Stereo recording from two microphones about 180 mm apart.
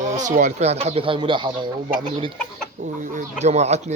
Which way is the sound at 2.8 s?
40° right (ahead or behind).